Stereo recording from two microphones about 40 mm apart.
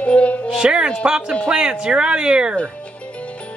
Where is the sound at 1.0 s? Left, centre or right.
Right.